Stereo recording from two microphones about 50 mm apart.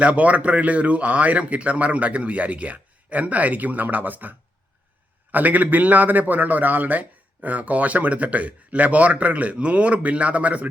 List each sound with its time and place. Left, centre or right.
0.0 s a man's voice: right